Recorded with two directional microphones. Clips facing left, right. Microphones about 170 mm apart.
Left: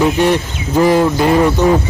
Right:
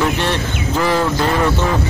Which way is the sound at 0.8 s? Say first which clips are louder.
Left 6 dB; 15° left (ahead or behind).